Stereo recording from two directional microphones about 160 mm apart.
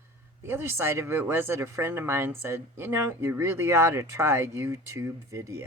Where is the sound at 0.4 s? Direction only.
15° right (ahead or behind).